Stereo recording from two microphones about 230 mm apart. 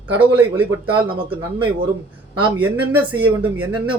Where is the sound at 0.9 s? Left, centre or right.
Right.